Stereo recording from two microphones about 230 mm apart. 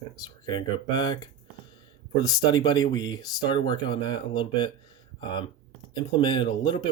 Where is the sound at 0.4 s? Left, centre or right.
Centre.